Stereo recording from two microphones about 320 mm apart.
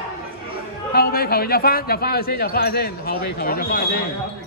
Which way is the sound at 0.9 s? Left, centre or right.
Left.